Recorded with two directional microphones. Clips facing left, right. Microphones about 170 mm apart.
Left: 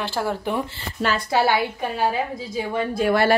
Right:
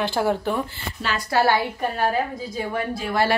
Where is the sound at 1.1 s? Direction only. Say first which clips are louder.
Right 2 dB; 20° left (ahead or behind).